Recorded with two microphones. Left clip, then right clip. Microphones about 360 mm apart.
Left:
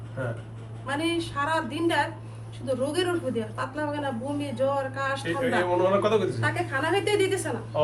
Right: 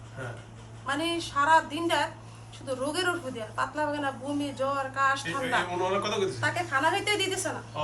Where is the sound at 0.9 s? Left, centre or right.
Centre.